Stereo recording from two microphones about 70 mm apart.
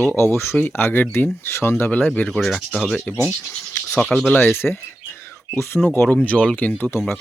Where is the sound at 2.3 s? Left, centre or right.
Centre.